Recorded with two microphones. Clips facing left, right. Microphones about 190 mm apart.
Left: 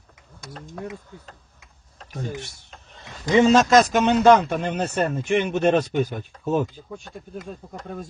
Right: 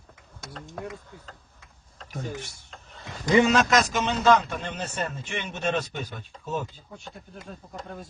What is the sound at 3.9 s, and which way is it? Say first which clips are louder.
Speech: left 6 dB; 55° left (ahead or behind).